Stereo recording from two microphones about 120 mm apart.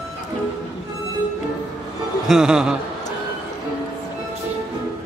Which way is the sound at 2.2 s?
5° right (ahead or behind).